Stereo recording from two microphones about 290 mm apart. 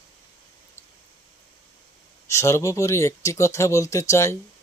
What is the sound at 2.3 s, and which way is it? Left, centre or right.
Speech, centre.